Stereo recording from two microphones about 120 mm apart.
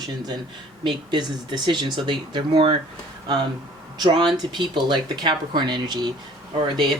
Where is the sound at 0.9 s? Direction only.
40° right (ahead or behind).